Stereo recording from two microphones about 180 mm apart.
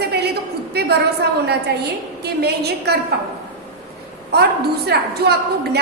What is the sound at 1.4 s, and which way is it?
A woman's voice, 65° right (ahead or behind).